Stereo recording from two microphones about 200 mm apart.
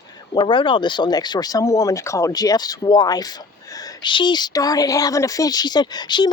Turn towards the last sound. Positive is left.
turn(degrees=20)  # may be behind; listen again after turning